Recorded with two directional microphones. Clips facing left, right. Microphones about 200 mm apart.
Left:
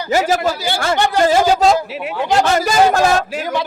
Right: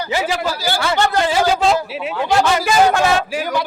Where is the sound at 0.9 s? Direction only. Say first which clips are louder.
Even; 15° left (ahead or behind).